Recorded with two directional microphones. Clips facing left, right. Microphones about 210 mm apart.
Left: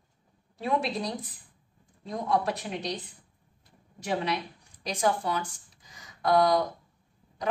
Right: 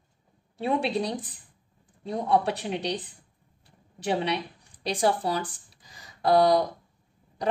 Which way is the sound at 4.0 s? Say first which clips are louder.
Right 3 dB; 30° right (ahead or behind).